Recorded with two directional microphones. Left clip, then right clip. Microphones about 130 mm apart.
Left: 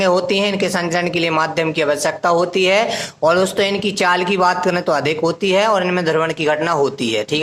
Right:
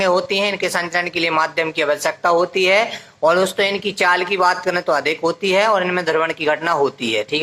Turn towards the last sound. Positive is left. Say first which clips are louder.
# left 1 dB
turn(degrees=45)  # may be behind; listen again after turning